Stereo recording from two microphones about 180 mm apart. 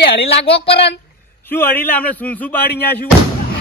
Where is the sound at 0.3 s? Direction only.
30° left (ahead or behind).